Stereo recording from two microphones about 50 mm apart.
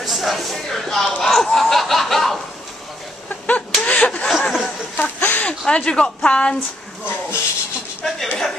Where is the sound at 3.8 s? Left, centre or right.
Left.